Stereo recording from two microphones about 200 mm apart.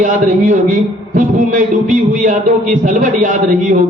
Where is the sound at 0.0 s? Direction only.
40° right (ahead or behind).